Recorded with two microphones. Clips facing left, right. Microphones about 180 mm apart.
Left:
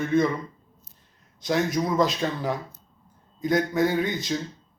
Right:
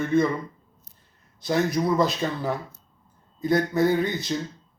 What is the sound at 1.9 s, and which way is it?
A man's voice, 15° left (ahead or behind).